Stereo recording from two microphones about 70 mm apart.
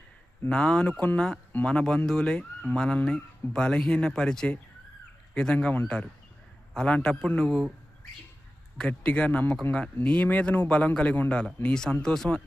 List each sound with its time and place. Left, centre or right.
0.4 s speech: centre
6.7 s speech: centre
8.8 s a man's voice: centre